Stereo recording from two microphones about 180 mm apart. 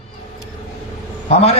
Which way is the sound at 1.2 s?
35° left (ahead or behind).